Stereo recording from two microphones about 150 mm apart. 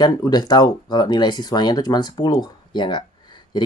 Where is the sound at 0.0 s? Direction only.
30° left (ahead or behind).